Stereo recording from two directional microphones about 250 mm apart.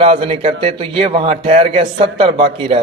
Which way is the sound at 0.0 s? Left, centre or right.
Right.